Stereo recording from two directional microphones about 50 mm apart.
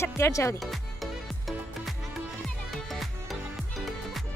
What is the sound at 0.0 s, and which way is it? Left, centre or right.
Speech, left.